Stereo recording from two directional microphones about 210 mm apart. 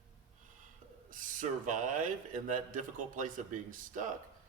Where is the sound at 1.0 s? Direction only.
40° right (ahead or behind).